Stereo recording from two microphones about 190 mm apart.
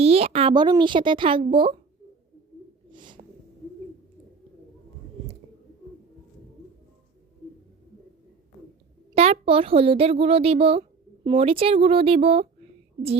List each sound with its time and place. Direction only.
0.0 s a woman's voice: 30° right (ahead or behind)
2.9 s bird: 25° right (ahead or behind)
9.1 s speech: 30° right (ahead or behind)